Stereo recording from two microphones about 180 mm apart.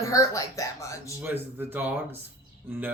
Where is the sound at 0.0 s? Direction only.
20° left (ahead or behind).